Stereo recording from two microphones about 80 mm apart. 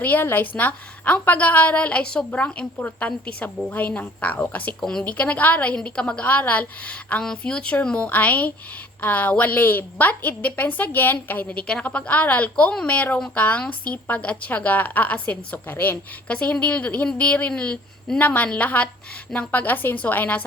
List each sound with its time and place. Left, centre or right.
0.0 s a woman's voice: left
4.8 s a woman's voice: centre